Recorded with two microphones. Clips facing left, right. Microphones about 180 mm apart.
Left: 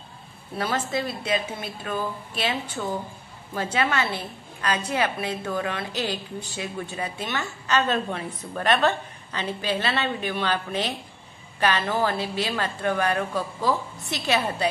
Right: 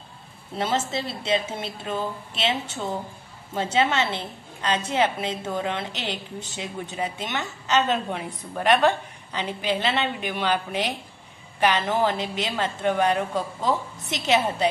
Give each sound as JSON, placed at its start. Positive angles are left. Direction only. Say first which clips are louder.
{"t": 0.6, "sound": "a woman's voice", "louder": "right 1 dB", "side_deg": -25}